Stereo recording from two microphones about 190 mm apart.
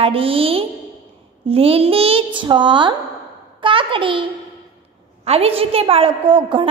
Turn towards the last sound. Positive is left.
turn(degrees=-25)  # may be behind; listen again after turning